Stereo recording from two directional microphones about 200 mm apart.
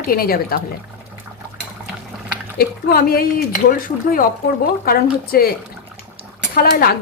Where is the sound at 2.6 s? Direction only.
50° left (ahead or behind).